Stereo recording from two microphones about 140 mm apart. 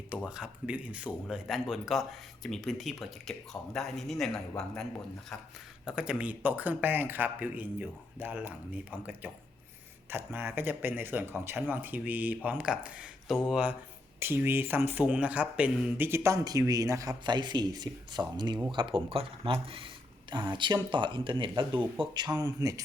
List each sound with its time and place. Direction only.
0.3 s speech: 5° right (ahead or behind)
5.8 s speech: 5° right (ahead or behind); by 22.7 s 25° right (ahead or behind)